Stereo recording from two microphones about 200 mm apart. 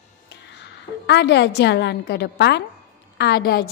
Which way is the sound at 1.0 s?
60° left (ahead or behind).